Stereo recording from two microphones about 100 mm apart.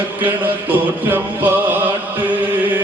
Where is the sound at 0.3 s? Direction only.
20° right (ahead or behind).